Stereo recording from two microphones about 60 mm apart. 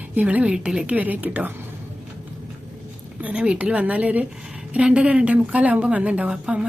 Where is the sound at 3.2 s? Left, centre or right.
Right.